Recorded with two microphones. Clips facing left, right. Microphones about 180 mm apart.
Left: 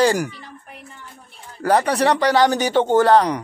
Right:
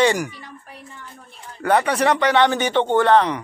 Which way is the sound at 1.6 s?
35° left (ahead or behind).